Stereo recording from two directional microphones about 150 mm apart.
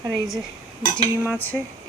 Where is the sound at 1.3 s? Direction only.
10° left (ahead or behind).